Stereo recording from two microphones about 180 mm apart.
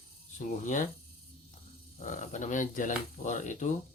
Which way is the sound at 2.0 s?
45° left (ahead or behind).